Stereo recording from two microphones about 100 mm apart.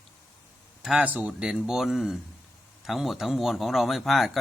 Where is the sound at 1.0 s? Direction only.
15° right (ahead or behind).